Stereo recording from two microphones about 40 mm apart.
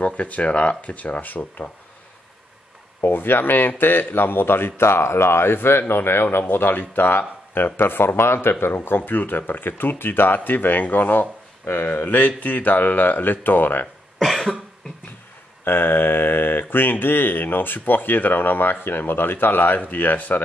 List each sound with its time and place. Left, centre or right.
0.0 s speech: left
3.0 s speech: left
6.5 s speech: left
14.2 s cough: centre
15.6 s speech: left